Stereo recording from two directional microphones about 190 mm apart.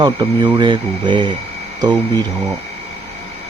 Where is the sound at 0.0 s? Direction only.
20° right (ahead or behind).